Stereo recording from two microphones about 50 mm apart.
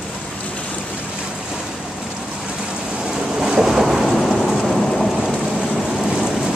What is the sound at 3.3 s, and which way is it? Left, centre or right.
Thunder, centre.